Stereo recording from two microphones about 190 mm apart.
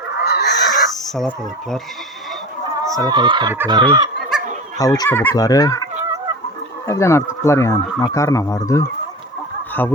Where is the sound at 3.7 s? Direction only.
25° right (ahead or behind).